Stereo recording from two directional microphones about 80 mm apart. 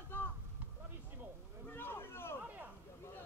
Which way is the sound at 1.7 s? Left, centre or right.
Left.